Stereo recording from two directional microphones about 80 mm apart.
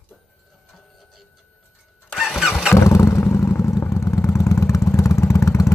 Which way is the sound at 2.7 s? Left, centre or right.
Left.